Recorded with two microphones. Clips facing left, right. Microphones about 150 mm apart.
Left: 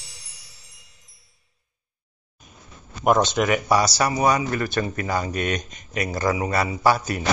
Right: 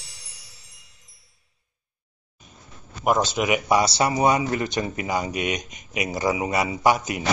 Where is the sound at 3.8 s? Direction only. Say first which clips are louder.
Even; 25° right (ahead or behind).